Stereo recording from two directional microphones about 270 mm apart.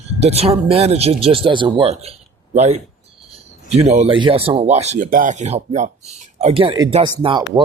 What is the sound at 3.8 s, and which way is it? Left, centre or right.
Speech, right.